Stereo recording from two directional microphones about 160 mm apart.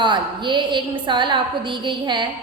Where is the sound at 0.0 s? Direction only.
30° right (ahead or behind).